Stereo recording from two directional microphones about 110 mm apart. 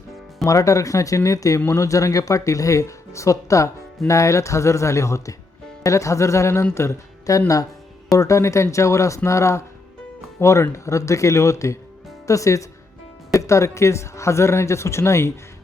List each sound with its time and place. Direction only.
0.4 s speech: 30° left (ahead or behind)